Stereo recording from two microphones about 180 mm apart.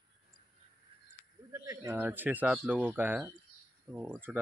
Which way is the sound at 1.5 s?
15° right (ahead or behind).